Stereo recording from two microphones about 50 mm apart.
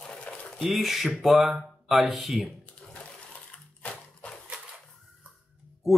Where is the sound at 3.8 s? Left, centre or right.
Left.